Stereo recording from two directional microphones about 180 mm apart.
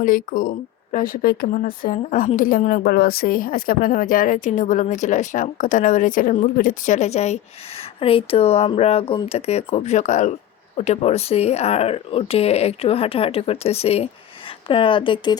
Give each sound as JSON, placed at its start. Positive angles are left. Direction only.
{"t": 0.0, "sound": "speech", "side_deg": 50}